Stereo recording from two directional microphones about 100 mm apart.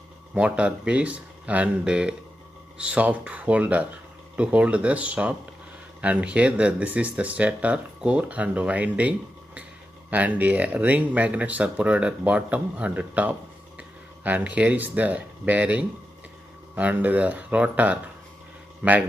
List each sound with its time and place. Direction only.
0.3 s speech: 10° right (ahead or behind)